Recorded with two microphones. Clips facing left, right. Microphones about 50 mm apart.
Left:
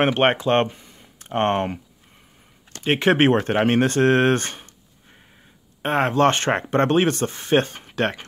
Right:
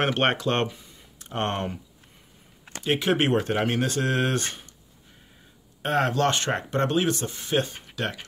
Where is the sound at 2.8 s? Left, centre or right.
Left.